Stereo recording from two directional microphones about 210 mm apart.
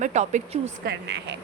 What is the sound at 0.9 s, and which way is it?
Speech, 55° right (ahead or behind).